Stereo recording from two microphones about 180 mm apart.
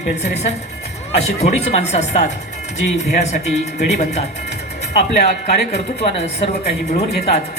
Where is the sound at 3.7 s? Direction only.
40° left (ahead or behind).